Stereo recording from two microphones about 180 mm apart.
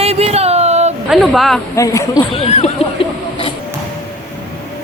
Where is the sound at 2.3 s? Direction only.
35° left (ahead or behind).